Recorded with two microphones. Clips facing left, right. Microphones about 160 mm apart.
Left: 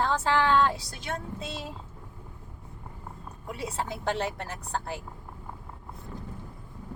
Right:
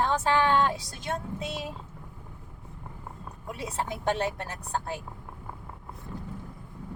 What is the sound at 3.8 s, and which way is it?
Speech, 15° right (ahead or behind).